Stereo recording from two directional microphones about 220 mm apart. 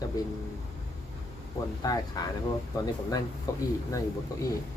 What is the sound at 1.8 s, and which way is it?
Speech, 15° left (ahead or behind).